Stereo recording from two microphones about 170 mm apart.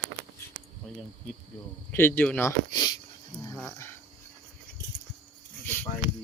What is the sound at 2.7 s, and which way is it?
Speech, 25° left (ahead or behind).